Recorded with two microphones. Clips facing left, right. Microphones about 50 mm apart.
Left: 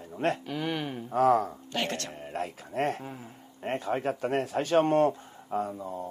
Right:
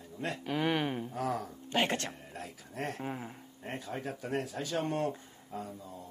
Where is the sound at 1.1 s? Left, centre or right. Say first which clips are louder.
Left 17 dB; left.